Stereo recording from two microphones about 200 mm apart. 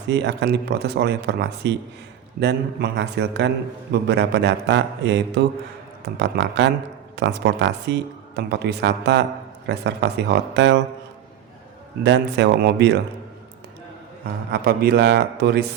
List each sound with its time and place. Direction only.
0.1 s speech: 60° right (ahead or behind)
12.0 s speech: 60° right (ahead or behind)
14.5 s a man's voice: 50° right (ahead or behind)